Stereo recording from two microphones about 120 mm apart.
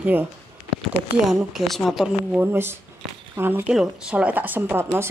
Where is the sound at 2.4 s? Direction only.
20° right (ahead or behind).